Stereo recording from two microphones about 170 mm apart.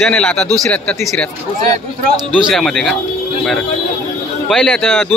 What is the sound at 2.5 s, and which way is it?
Speech, centre (ahead or behind).